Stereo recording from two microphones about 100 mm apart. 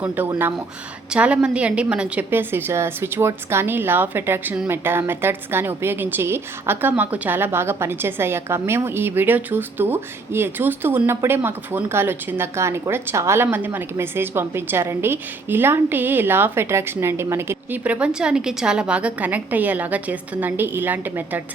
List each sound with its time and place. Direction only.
0.0 s a woman's voice: 20° right (ahead or behind)
17.8 s a woman's voice: 15° right (ahead or behind)